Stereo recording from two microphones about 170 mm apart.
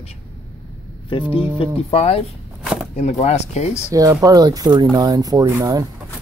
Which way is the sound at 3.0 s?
40° left (ahead or behind).